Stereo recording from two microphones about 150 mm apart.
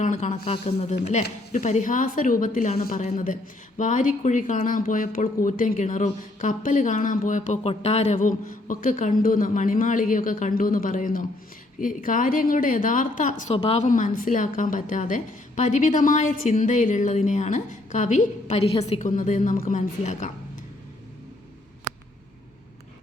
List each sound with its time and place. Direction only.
0.0 s speech: 55° left (ahead or behind)